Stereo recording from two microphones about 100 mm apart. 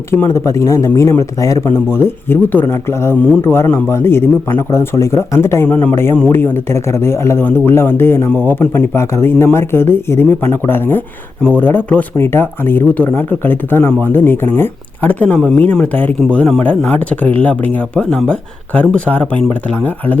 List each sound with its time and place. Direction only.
0.1 s speech: 25° left (ahead or behind)
5.6 s speech: 15° left (ahead or behind)
5.9 s speech: 25° left (ahead or behind)